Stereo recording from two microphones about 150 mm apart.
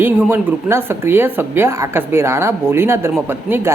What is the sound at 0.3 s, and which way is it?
A woman's voice, 15° right (ahead or behind).